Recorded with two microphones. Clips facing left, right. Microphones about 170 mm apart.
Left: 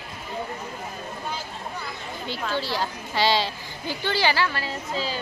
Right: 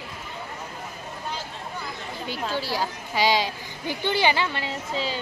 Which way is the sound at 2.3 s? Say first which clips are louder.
Left 1 dB; 10° right (ahead or behind).